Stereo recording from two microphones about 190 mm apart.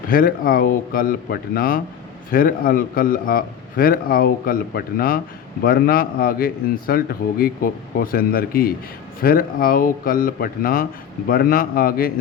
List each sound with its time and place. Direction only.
0.1 s a man's voice: 50° left (ahead or behind)